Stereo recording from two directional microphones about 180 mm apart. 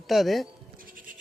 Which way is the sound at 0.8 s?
50° right (ahead or behind).